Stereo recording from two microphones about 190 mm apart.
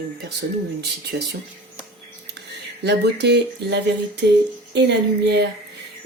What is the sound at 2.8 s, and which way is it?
Speech, 60° right (ahead or behind).